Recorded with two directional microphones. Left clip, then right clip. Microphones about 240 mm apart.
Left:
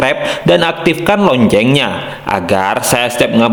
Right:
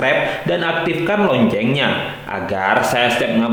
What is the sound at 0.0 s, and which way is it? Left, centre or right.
A man's voice, left.